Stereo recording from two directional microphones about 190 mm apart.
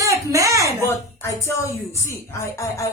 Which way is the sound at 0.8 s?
15° left (ahead or behind).